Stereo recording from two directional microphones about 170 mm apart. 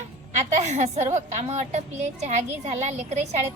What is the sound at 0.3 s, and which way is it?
A woman's voice, 45° right (ahead or behind).